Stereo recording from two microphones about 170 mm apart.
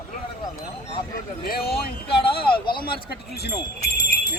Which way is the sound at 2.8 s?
70° left (ahead or behind).